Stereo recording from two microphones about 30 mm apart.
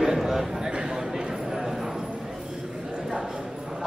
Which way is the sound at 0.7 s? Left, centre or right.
Right.